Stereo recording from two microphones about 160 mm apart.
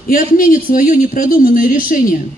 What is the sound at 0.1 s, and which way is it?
A man's voice, 60° left (ahead or behind).